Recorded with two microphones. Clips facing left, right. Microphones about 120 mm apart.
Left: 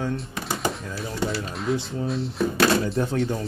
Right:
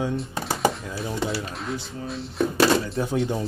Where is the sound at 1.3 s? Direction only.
Centre (ahead or behind).